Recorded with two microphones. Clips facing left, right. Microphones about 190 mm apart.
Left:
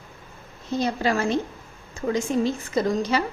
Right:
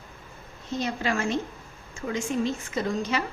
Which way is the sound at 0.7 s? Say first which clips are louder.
Left 4 dB; 35° left (ahead or behind).